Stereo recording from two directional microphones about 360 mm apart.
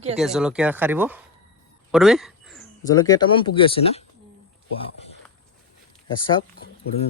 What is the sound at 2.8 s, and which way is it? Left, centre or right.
Speech, centre.